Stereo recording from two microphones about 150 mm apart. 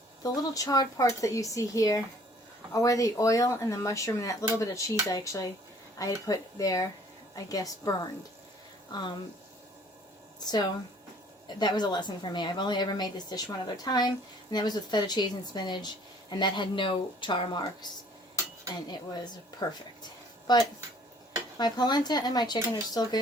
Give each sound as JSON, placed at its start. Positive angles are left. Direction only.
{"t": 0.2, "sound": "a woman's voice", "side_deg": 25}
{"t": 11.4, "sound": "a woman's voice", "side_deg": 30}
{"t": 19.6, "sound": "a woman's voice", "side_deg": 25}